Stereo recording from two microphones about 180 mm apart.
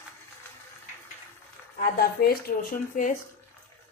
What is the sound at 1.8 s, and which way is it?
Speech, 55° left (ahead or behind).